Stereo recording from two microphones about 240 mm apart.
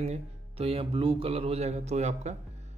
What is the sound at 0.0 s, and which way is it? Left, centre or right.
Speech, right.